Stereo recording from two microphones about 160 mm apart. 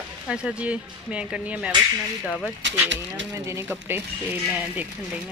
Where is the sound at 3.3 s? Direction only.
15° right (ahead or behind).